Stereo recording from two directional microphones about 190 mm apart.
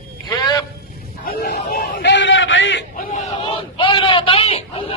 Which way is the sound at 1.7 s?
65° left (ahead or behind).